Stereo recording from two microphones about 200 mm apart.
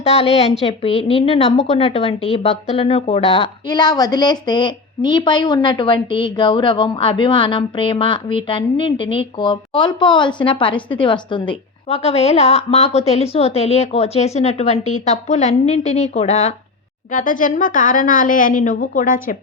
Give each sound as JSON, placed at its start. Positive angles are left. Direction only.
{"t": 0.0, "sound": "a woman's voice", "side_deg": 30}